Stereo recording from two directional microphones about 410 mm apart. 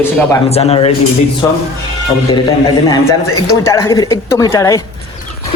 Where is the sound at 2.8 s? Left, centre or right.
Centre.